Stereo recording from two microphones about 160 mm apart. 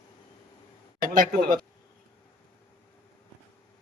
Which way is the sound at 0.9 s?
55° right (ahead or behind).